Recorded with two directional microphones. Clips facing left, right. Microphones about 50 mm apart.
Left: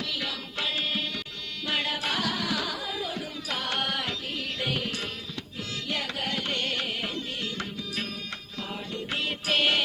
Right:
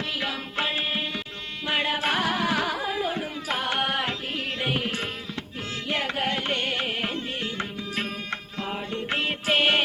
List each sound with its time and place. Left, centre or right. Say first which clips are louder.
0.2 s music: right 4 dB; right